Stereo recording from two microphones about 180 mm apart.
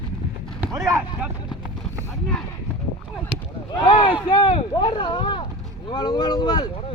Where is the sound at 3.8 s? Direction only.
30° left (ahead or behind).